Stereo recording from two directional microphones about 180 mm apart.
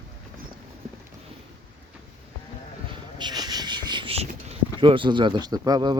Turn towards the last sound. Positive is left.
turn(degrees=-20)  # may be behind; listen again after turning